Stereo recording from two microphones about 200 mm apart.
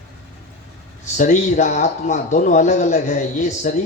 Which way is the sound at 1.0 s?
35° left (ahead or behind).